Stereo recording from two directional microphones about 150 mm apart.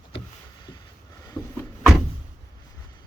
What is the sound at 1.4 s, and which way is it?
Wood, 30° left (ahead or behind).